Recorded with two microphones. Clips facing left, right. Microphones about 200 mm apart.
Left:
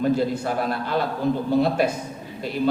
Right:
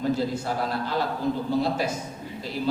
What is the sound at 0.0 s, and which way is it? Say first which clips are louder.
A man's voice: left 4 dB; 55° left (ahead or behind).